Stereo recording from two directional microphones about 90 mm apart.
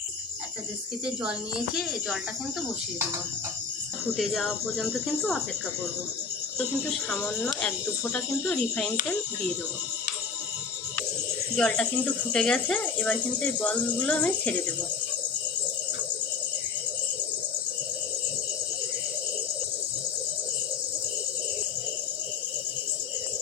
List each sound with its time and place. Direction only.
1.2 s a child's voice: 10° right (ahead or behind)
4.2 s speech: centre (ahead or behind)
7.2 s speech: 25° left (ahead or behind)
11.5 s speech: 10° left (ahead or behind)